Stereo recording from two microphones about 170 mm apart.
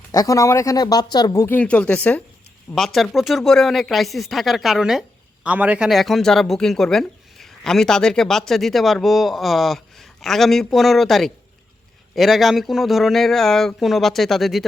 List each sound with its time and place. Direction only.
0.1 s speech: 20° left (ahead or behind); by 14.6 s centre (ahead or behind)